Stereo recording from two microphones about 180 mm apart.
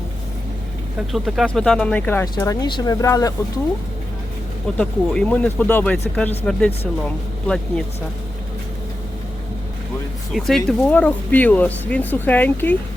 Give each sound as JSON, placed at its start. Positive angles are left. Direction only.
{"t": 0.9, "sound": "speech", "side_deg": 0}
{"t": 4.8, "sound": "speech", "side_deg": 5}
{"t": 10.3, "sound": "speech", "side_deg": 0}